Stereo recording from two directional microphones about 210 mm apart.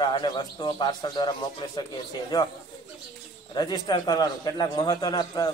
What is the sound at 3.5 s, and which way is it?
A man's voice, 20° left (ahead or behind).